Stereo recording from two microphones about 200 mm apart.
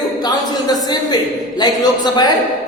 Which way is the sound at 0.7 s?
20° left (ahead or behind).